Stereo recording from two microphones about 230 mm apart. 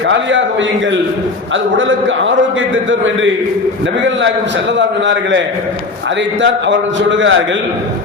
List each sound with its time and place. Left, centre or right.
0.1 s a man's voice: right
1.9 s speech: right
4.8 s a man's voice: right
6.4 s a man's voice: right